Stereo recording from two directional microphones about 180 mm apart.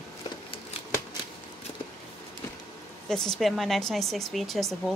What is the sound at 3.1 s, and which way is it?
Speech, 5° left (ahead or behind).